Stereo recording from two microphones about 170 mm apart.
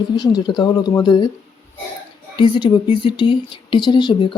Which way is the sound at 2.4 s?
25° left (ahead or behind).